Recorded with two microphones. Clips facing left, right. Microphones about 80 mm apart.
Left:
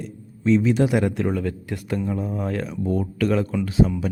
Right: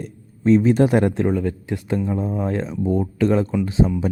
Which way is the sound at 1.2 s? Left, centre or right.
Right.